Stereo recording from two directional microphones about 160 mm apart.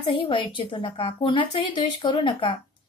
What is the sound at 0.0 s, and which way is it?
A woman's voice, 35° left (ahead or behind).